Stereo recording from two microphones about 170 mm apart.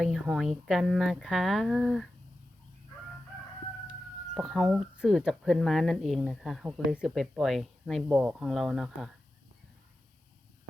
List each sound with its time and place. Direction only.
0.0 s speech: 5° right (ahead or behind)
4.4 s speech: centre (ahead or behind)